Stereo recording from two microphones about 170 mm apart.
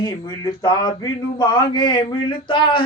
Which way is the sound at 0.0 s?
25° left (ahead or behind).